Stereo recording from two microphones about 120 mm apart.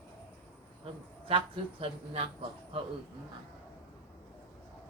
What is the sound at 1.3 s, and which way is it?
Speech, 50° right (ahead or behind).